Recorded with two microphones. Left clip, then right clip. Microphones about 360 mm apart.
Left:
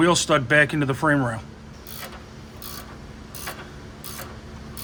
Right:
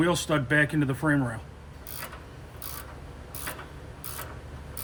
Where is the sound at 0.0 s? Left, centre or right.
Left.